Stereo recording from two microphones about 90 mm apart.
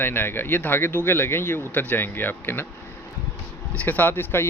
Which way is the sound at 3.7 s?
15° left (ahead or behind).